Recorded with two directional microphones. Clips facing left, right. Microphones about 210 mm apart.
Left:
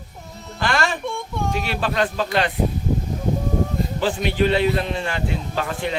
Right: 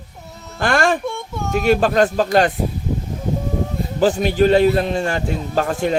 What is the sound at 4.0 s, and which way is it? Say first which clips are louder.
Speech: right 6 dB; 45° right (ahead or behind).